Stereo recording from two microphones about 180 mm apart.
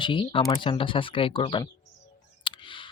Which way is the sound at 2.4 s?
30° left (ahead or behind).